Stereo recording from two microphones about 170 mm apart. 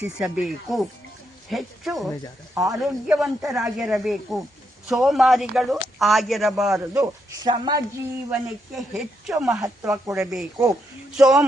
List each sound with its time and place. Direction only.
0.0 s a man's voice: 5° right (ahead or behind)
6.9 s speech: 20° right (ahead or behind)
8.3 s a man's voice: 5° right (ahead or behind)